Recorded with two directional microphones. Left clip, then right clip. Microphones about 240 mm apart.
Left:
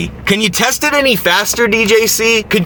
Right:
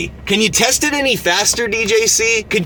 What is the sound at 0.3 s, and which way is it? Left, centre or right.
Speech, left.